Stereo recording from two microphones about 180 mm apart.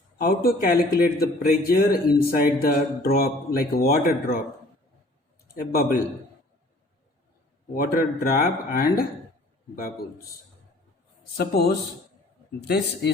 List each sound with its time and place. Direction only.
0.2 s a man's voice: 55° left (ahead or behind)
5.5 s a man's voice: 55° left (ahead or behind)
7.7 s a man's voice: 50° left (ahead or behind)
11.3 s a man's voice: 60° left (ahead or behind)